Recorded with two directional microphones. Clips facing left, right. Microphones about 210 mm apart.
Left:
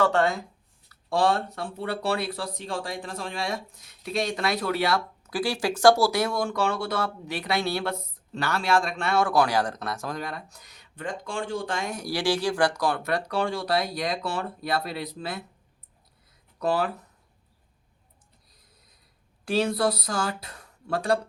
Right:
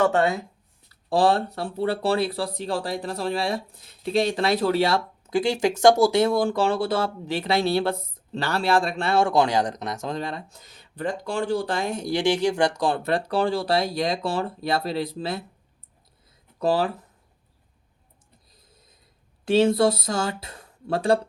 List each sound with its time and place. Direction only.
0.0 s speech: 20° right (ahead or behind)
1.1 s speech: 35° right (ahead or behind)
16.6 s speech: 30° right (ahead or behind)
19.5 s speech: 25° right (ahead or behind)